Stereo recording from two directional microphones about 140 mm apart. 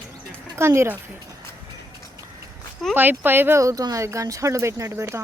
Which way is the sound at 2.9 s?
15° right (ahead or behind).